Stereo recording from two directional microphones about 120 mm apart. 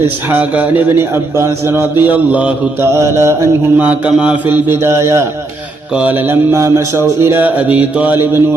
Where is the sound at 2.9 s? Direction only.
25° right (ahead or behind).